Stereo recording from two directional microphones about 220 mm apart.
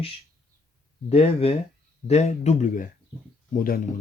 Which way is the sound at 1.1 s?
25° left (ahead or behind).